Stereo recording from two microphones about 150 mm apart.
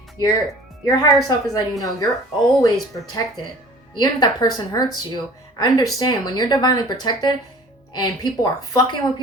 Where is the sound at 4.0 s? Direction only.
25° left (ahead or behind).